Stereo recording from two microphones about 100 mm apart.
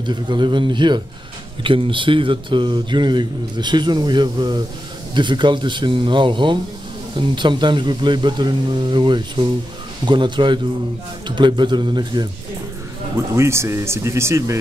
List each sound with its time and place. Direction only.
0.0 s speech: 50° right (ahead or behind)
13.1 s speech: 30° right (ahead or behind)